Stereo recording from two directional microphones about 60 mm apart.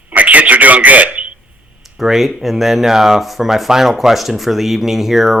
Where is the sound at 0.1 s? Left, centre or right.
Right.